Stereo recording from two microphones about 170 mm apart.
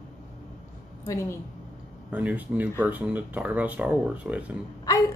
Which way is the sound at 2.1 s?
10° right (ahead or behind).